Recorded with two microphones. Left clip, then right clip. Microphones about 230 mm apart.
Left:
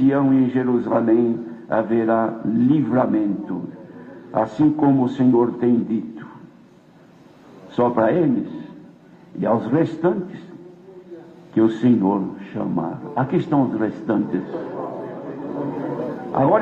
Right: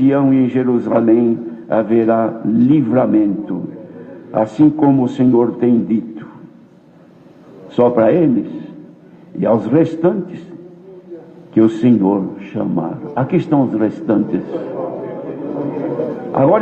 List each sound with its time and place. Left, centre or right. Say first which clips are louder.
0.0 s a man's voice: right 4 dB; right
7.7 s a man's voice: right 6 dB; right
11.5 s a man's voice: right 5 dB; right